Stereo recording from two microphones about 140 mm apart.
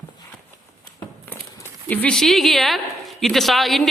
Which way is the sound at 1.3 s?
10° left (ahead or behind).